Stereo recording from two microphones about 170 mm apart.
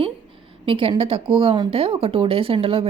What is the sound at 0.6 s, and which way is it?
Speech, 30° right (ahead or behind).